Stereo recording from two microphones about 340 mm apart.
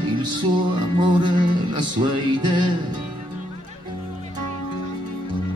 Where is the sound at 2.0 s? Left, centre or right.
Centre.